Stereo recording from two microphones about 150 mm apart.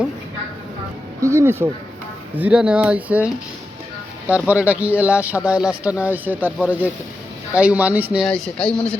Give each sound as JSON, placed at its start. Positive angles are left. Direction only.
{"t": 1.2, "sound": "speech", "side_deg": -20}
{"t": 8.2, "sound": "speech", "side_deg": 5}